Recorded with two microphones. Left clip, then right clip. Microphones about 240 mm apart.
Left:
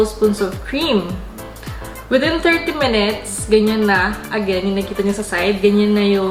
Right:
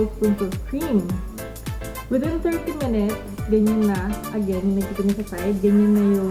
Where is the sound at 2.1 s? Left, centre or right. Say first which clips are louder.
Left 9 dB; centre.